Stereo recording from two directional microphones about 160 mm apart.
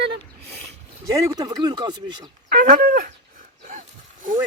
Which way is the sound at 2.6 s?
60° right (ahead or behind).